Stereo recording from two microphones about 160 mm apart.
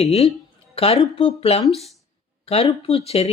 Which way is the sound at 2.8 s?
40° left (ahead or behind).